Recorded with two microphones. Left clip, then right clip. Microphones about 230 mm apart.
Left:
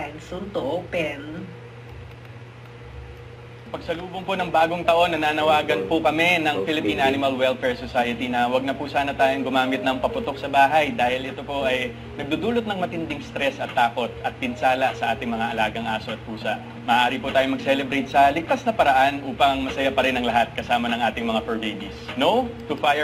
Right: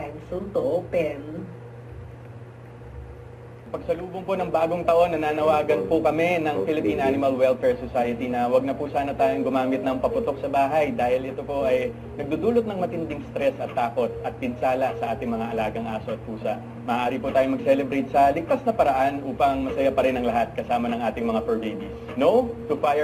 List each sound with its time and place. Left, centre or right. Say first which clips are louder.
0.5 s speech: right 2 dB; centre
3.7 s a man's voice: right 1 dB; centre